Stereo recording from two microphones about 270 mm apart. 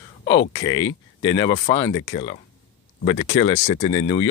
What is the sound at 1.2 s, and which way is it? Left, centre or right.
Speech, centre.